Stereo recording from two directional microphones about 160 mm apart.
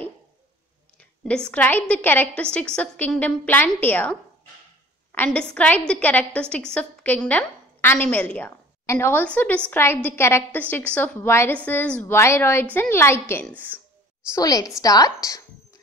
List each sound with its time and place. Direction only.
1.2 s a woman's voice: 5° left (ahead or behind)
14.3 s a woman's voice: 20° left (ahead or behind)